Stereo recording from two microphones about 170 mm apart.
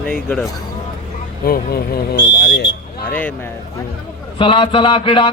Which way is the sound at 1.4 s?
60° left (ahead or behind).